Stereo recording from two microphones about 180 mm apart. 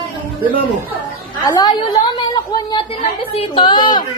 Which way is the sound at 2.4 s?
25° left (ahead or behind).